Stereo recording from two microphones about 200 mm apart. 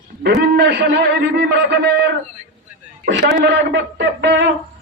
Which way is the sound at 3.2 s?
60° right (ahead or behind).